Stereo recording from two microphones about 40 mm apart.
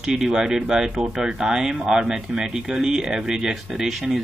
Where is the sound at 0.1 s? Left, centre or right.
Centre.